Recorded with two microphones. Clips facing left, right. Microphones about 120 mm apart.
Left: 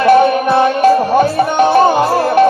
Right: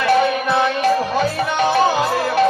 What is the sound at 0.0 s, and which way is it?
Music, 50° left (ahead or behind).